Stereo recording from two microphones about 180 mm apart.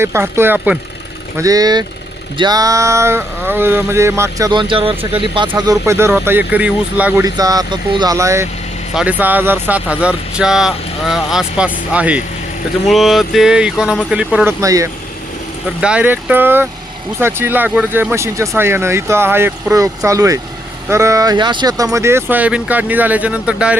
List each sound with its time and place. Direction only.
0.0 s speech: 15° right (ahead or behind)
1.4 s speech: 20° right (ahead or behind)
7.3 s speech: 20° right (ahead or behind); by 14.5 s 5° right (ahead or behind)
14.6 s speech: 20° right (ahead or behind)
15.8 s speech: 5° right (ahead or behind)